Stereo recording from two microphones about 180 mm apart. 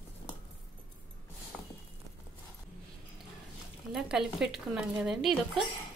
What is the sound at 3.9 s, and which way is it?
Speech, 5° right (ahead or behind).